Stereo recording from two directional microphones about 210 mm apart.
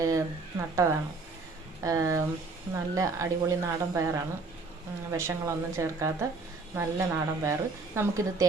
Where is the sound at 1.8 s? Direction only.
15° right (ahead or behind).